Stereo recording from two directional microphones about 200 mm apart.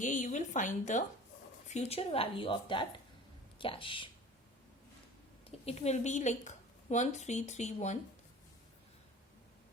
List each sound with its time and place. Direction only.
0.0 s a woman's voice: 40° left (ahead or behind)
5.5 s a woman's voice: 30° left (ahead or behind)